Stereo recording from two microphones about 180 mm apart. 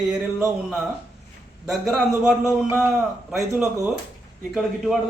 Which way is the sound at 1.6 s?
Centre (ahead or behind).